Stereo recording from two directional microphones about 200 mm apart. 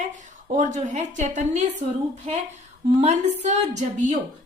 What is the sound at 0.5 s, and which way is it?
Speech, 40° right (ahead or behind).